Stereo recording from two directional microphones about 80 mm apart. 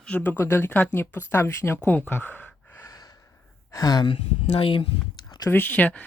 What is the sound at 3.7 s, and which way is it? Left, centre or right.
Speech, left.